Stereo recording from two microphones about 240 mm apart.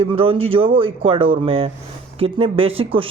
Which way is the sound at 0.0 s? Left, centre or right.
Right.